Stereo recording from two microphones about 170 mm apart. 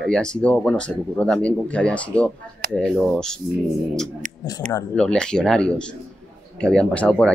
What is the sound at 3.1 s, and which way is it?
Speech, 5° left (ahead or behind).